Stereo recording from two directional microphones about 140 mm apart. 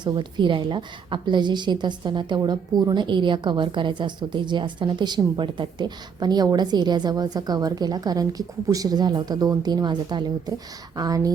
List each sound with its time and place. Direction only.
0.0 s a woman's voice: 35° right (ahead or behind)